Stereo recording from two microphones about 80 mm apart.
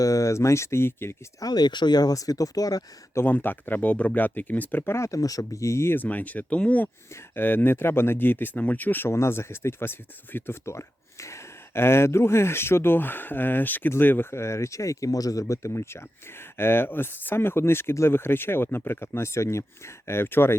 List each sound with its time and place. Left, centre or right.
0.0 s speech: left
1.4 s speech: left
3.2 s speech: left
4.9 s speech: left; by 6.9 s centre
7.1 s speech: left